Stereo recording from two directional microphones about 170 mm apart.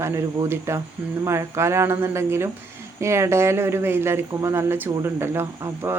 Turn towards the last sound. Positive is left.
turn(degrees=-15)  # may be behind; listen again after turning